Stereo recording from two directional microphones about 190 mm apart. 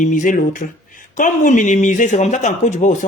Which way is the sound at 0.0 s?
45° left (ahead or behind).